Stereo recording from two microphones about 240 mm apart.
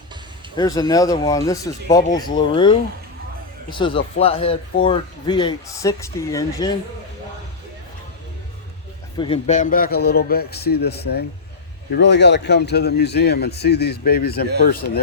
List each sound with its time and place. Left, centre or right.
0.5 s speech: centre
9.1 s a man's voice: left